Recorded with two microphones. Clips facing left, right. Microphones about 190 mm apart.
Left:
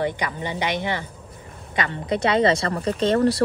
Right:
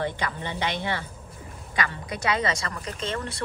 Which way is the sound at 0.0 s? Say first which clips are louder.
Left 4 dB; 15° left (ahead or behind).